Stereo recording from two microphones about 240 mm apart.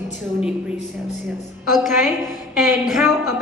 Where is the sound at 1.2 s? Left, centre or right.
Centre.